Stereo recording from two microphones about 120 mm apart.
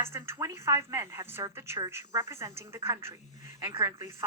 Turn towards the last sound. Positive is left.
turn(degrees=-20)  # may be behind; listen again after turning